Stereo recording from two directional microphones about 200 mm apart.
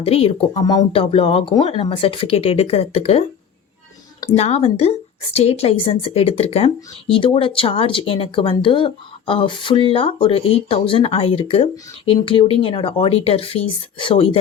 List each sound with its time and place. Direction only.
0.0 s speech: 30° left (ahead or behind)
0.6 s speech: 20° left (ahead or behind)
4.4 s a woman's voice: 30° left (ahead or behind)